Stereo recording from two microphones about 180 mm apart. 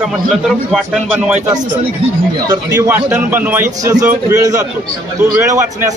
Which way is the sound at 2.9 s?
10° right (ahead or behind).